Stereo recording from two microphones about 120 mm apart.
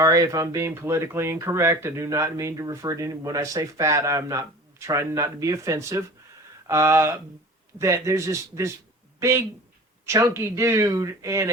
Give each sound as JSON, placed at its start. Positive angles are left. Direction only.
{"t": 0.0, "sound": "speech", "side_deg": -25}